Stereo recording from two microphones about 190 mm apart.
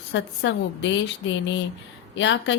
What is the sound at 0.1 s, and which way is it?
Speech, 75° left (ahead or behind).